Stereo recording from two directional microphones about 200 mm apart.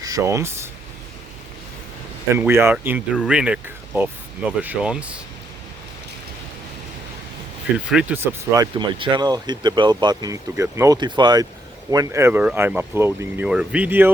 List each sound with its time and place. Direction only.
0.0 s speech: 15° right (ahead or behind)
2.3 s speech: 10° right (ahead or behind)
7.9 s speech: 5° right (ahead or behind)